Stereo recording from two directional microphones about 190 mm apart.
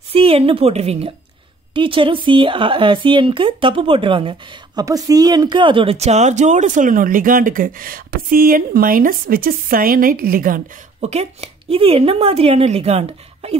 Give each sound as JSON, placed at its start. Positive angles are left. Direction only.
{"t": 0.1, "sound": "speech", "side_deg": -30}